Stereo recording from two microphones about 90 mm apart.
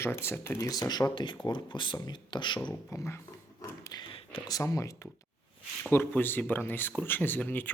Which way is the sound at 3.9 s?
80° left.